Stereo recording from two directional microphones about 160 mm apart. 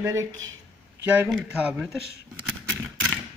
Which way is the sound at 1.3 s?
5° right (ahead or behind).